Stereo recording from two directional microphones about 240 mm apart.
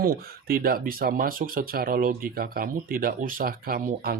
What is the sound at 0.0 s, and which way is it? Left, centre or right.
Speech, right.